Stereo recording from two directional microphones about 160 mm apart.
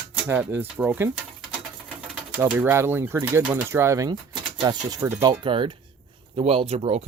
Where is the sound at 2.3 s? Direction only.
10° right (ahead or behind).